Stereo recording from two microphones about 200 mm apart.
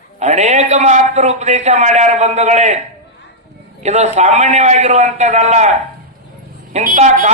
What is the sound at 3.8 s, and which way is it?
A man's voice, 35° right (ahead or behind).